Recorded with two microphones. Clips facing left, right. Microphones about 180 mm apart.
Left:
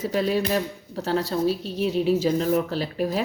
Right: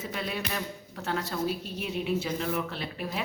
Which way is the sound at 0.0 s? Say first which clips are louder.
Left 11 dB; 35° left (ahead or behind).